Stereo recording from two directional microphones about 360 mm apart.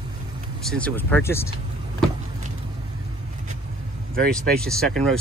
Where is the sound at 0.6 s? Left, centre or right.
Centre.